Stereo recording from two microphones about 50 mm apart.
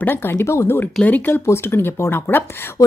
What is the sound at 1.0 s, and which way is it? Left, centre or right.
Speech, left.